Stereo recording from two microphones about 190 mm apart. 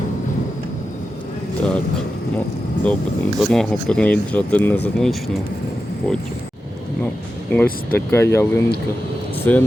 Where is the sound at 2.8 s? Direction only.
5° left (ahead or behind).